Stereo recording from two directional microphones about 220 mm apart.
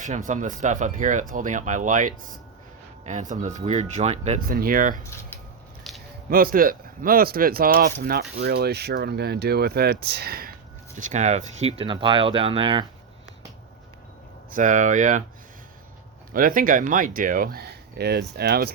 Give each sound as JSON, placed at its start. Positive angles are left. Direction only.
{"t": 0.3, "sound": "speech", "side_deg": -35}
{"t": 5.0, "sound": "speech", "side_deg": 10}
{"t": 5.9, "sound": "squish", "side_deg": 0}
{"t": 6.3, "sound": "speech", "side_deg": -40}
{"t": 10.9, "sound": "speech", "side_deg": -30}
{"t": 14.5, "sound": "speech", "side_deg": -35}
{"t": 16.3, "sound": "speech", "side_deg": -40}